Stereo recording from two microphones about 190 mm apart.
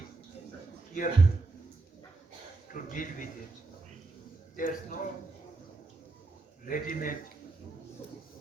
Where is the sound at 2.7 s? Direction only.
45° left (ahead or behind).